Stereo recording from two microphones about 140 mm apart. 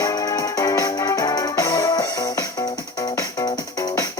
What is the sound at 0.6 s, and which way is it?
Music, 25° left (ahead or behind).